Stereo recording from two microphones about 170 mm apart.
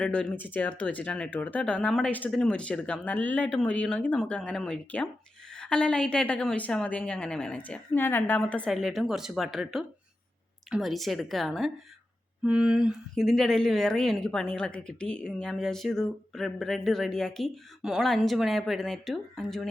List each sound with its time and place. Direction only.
0.0 s speech: 5° left (ahead or behind)